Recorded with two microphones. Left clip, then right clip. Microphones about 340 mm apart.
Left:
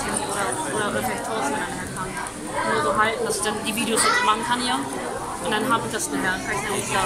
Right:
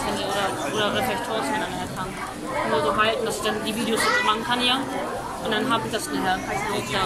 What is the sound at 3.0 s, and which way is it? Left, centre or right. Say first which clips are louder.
Speech: even; centre.